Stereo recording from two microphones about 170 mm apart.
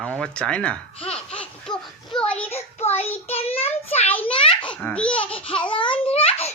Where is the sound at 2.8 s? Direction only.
35° left (ahead or behind).